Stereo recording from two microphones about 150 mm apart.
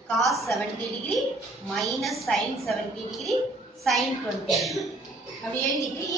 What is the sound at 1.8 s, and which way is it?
A woman's voice, centre (ahead or behind).